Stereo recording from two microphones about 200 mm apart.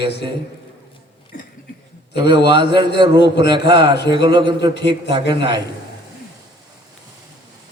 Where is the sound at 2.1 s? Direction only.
60° left (ahead or behind).